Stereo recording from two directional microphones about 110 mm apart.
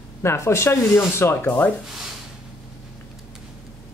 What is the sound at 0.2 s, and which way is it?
Speech, 25° left (ahead or behind).